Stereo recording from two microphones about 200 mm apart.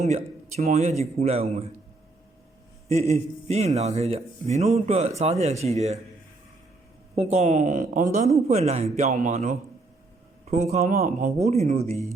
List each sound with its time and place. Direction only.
0.0 s speech: 35° right (ahead or behind)
2.9 s speech: 30° right (ahead or behind)
7.2 s speech: 35° right (ahead or behind)
10.9 s speech: 45° right (ahead or behind)
11.4 s speech: 35° right (ahead or behind)